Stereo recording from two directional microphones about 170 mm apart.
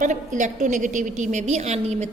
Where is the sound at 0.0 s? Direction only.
45° right (ahead or behind).